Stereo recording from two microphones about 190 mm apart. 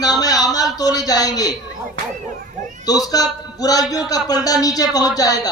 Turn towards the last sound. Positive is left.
turn(degrees=20)  # may be behind; listen again after turning